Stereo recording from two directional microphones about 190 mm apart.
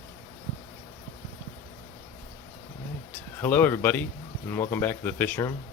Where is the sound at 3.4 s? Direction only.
10° left (ahead or behind).